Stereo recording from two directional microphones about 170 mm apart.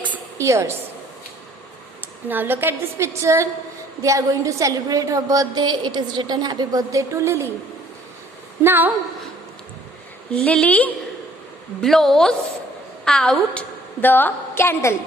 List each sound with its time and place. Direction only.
0.3 s a woman's voice: 15° right (ahead or behind)
2.0 s a woman's voice: 10° right (ahead or behind)
8.6 s a woman's voice: 10° right (ahead or behind)
10.3 s a woman's voice: 5° left (ahead or behind)